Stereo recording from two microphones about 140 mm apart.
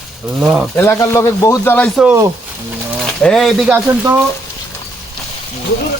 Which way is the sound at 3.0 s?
5° left (ahead or behind).